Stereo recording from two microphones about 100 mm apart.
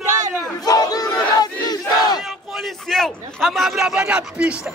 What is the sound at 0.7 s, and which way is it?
Battle cry, 40° left (ahead or behind).